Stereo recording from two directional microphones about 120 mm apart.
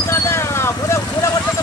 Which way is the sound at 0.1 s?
20° left (ahead or behind).